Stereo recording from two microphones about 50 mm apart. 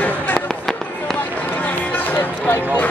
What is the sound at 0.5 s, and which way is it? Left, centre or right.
Fireworks, centre.